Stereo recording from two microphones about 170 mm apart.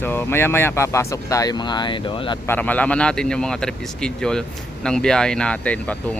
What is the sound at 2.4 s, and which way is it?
Speech, 10° left (ahead or behind).